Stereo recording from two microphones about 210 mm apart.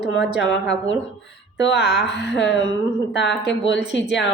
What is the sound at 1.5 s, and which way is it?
Speech, 55° left (ahead or behind).